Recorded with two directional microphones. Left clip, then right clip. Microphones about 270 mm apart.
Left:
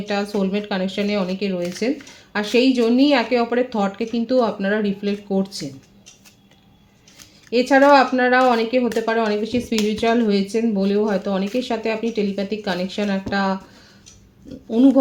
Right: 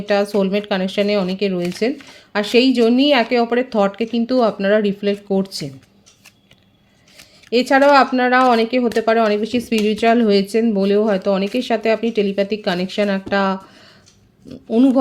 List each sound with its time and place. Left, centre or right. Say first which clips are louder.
0.0 s speech: right 6 dB; right
7.5 s speech: right 1 dB; right
14.7 s speech: right 1 dB; right